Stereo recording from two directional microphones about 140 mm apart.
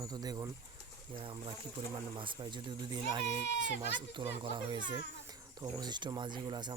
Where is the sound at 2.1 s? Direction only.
35° right (ahead or behind).